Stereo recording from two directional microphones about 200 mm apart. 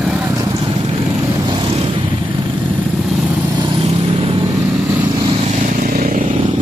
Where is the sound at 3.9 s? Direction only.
30° right (ahead or behind).